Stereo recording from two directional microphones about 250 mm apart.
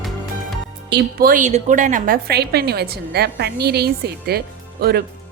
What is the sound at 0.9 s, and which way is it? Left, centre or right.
A woman's voice, right.